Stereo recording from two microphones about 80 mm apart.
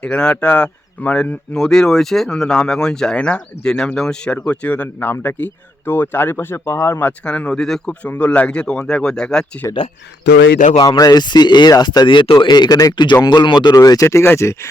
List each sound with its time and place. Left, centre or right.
0.0 s speech: centre; by 7.1 s left
7.3 s speech: centre
8.0 s speech: centre
10.8 s speech: left
11.7 s speech: left
13.7 s speech: left